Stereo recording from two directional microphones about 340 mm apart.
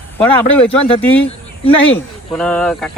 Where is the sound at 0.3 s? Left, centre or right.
Centre.